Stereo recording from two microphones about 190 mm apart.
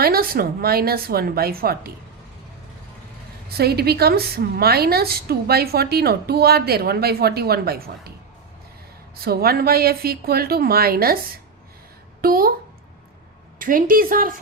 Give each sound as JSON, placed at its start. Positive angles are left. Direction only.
{"t": 0.0, "sound": "a woman's voice", "side_deg": -50}
{"t": 3.6, "sound": "a woman's voice", "side_deg": -55}
{"t": 9.2, "sound": "a woman's voice", "side_deg": -55}
{"t": 12.2, "sound": "a woman's voice", "side_deg": -50}
{"t": 13.6, "sound": "a woman's voice", "side_deg": -45}